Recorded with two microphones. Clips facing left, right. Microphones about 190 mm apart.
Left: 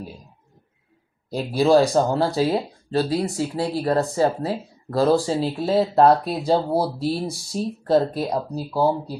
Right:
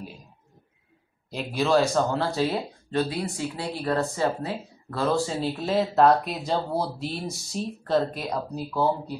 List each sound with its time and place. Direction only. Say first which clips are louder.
1.3 s speech: left 6 dB; 35° left (ahead or behind)